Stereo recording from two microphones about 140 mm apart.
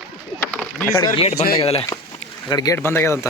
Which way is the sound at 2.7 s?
15° left (ahead or behind).